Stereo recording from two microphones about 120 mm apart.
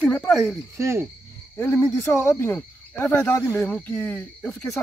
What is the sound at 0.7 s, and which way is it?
Speech, 25° right (ahead or behind).